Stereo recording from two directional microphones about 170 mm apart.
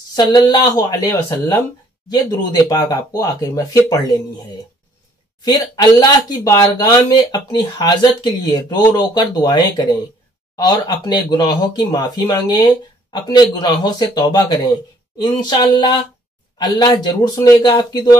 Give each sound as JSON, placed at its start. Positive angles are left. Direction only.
{"t": 0.1, "sound": "speech", "side_deg": 25}
{"t": 2.6, "sound": "speech", "side_deg": 20}
{"t": 5.4, "sound": "speech", "side_deg": 25}